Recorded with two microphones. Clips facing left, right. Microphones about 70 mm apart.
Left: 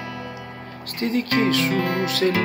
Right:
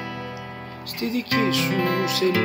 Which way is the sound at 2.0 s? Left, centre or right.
Left.